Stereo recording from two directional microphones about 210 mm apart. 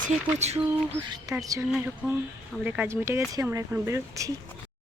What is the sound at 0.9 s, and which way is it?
Speech, 20° right (ahead or behind).